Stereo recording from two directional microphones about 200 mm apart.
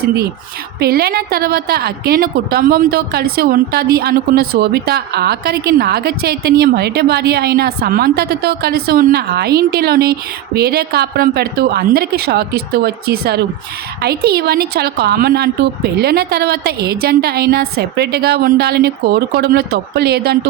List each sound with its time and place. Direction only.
0.8 s a woman's voice: 50° right (ahead or behind)